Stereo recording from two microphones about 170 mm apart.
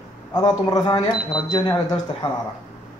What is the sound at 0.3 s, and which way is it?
A man's voice, 25° left (ahead or behind).